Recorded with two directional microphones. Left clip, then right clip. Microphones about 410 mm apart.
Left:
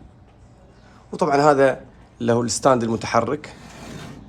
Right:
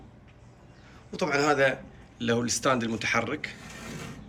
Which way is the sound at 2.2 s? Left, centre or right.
Centre.